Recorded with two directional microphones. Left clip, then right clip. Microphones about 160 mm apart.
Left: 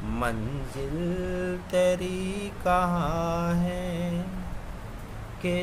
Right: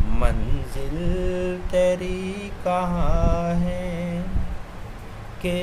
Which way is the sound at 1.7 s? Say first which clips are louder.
Right 3 dB; 20° left (ahead or behind).